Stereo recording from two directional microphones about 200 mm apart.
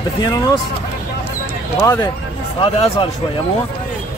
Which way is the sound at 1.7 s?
15° left (ahead or behind).